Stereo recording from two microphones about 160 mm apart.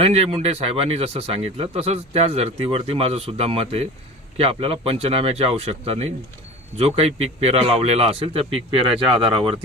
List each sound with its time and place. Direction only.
0.0 s speech: 40° right (ahead or behind)